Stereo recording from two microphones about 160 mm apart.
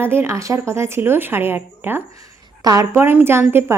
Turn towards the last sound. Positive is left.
turn(degrees=-15)  # may be behind; listen again after turning